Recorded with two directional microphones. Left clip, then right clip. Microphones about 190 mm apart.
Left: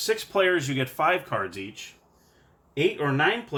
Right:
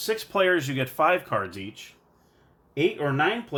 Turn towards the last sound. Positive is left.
turn(degrees=-25)  # may be behind; listen again after turning